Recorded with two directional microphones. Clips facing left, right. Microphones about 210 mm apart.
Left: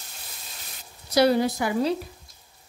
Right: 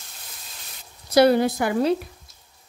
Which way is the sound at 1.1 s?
55° right (ahead or behind).